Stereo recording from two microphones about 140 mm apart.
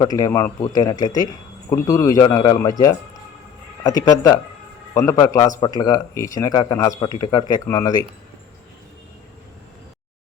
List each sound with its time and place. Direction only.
0.0 s speech: 30° left (ahead or behind)
2.2 s speech: 35° left (ahead or behind)